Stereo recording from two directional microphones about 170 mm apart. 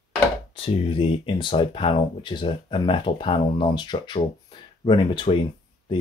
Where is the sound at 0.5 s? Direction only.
30° left (ahead or behind).